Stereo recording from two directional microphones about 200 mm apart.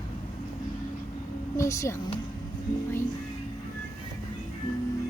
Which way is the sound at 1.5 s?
15° left (ahead or behind).